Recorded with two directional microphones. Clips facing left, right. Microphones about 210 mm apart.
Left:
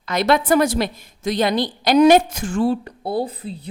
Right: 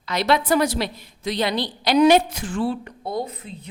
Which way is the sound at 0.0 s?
50° left (ahead or behind).